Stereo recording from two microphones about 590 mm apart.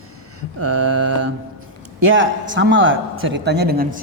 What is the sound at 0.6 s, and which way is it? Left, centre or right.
A man's voice, right.